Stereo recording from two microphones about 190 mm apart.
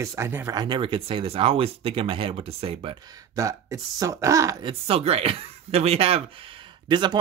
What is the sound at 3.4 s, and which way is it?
Speech, 15° right (ahead or behind).